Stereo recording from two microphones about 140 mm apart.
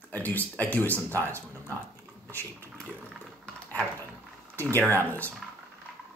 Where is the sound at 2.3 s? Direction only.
15° left (ahead or behind).